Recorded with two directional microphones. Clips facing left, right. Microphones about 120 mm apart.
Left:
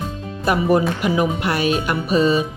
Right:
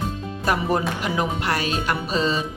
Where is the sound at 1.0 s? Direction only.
15° left (ahead or behind).